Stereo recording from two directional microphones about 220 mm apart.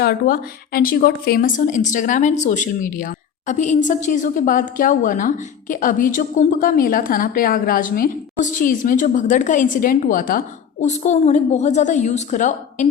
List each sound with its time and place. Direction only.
0.0 s a woman's voice: 45° left (ahead or behind)